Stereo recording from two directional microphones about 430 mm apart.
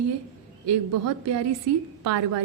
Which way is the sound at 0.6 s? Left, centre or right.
Right.